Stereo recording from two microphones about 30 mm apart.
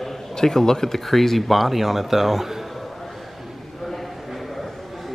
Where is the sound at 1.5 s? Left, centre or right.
Centre.